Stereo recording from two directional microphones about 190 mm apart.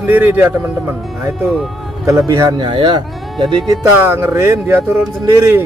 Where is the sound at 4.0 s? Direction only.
15° right (ahead or behind).